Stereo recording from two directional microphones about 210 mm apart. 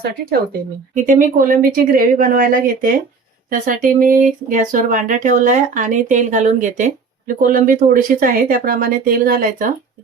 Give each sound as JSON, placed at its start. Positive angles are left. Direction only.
{"t": 1.0, "sound": "speech", "side_deg": -40}